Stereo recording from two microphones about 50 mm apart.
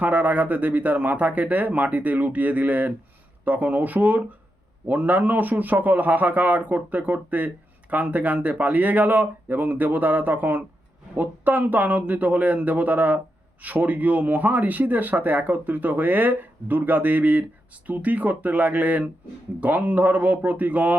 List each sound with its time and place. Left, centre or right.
0.0 s a man's voice: right